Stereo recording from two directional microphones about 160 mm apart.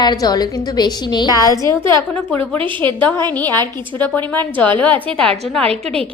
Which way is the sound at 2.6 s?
30° right (ahead or behind).